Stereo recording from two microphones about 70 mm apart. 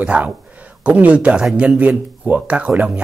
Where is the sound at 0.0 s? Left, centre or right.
Centre.